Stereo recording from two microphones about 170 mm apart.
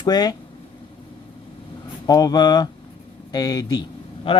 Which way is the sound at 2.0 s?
20° left (ahead or behind).